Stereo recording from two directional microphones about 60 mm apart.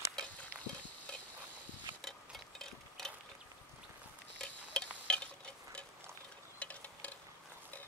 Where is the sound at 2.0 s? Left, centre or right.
Centre.